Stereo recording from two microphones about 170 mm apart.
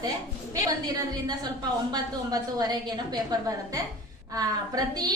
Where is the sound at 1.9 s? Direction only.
25° right (ahead or behind).